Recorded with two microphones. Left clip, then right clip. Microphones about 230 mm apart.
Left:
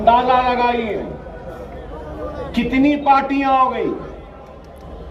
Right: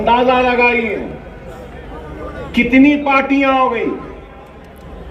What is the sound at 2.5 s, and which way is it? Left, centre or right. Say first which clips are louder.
A man's voice: right 6 dB; left.